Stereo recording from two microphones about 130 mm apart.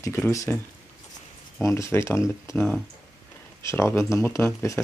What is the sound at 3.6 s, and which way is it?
Speech, 20° left (ahead or behind).